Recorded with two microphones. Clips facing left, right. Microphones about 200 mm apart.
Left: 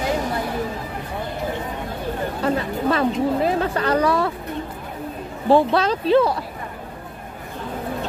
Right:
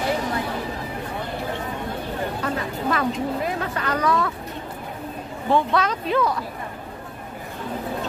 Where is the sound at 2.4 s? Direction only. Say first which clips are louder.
Left 5 dB; 30° left (ahead or behind).